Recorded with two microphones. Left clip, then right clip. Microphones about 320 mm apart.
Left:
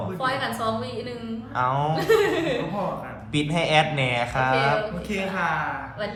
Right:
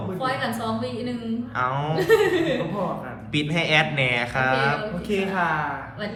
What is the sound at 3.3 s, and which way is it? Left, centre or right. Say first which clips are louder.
A man's voice: even; centre.